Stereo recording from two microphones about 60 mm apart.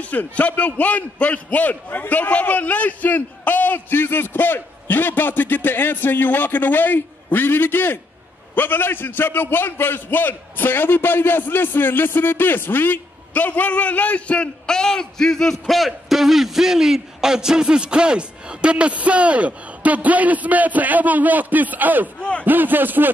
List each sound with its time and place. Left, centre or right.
0.0 s a man's voice: left; by 23.1 s right